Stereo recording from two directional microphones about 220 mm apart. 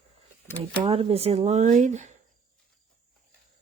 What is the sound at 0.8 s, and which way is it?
Speech, 25° right (ahead or behind).